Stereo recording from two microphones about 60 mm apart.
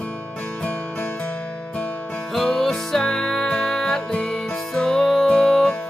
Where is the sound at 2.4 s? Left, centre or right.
Centre.